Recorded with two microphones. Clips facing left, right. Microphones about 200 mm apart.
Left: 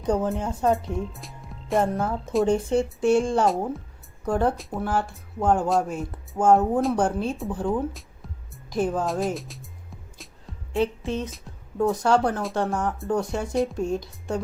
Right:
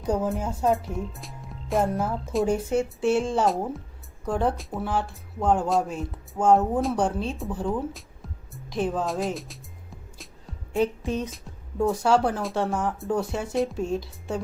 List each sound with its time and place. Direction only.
0.0 s speech: 5° right (ahead or behind)
10.7 s music: 30° left (ahead or behind)
11.8 s speech: 5° right (ahead or behind)